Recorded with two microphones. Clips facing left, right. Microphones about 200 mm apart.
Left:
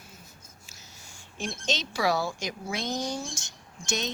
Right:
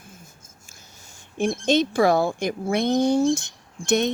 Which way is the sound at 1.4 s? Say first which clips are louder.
Right 12 dB; 55° right (ahead or behind).